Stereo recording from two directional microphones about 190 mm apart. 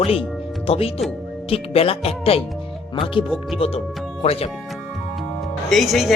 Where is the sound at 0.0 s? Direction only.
30° left (ahead or behind).